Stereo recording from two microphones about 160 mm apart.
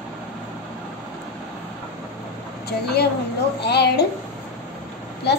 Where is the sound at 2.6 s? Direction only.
90° left.